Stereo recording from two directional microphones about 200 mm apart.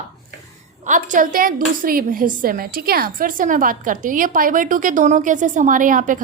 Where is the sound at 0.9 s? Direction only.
40° right (ahead or behind).